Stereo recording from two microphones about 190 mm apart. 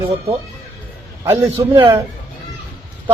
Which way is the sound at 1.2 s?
10° right (ahead or behind).